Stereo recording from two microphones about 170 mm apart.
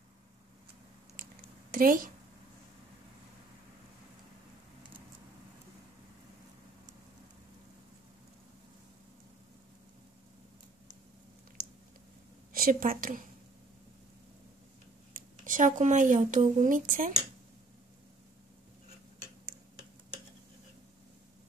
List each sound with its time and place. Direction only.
1.7 s a woman's voice: 55° right (ahead or behind)
12.5 s a woman's voice: 55° right (ahead or behind)
15.1 s speech: 50° right (ahead or behind)